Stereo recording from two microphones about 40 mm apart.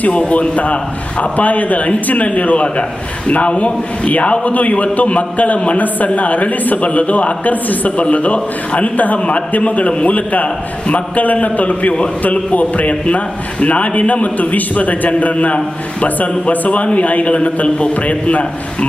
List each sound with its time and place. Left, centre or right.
0.0 s a man's voice: left